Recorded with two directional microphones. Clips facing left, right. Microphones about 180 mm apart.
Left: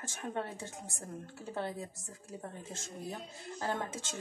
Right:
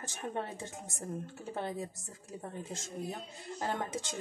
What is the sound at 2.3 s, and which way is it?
A woman's voice, 20° right (ahead or behind).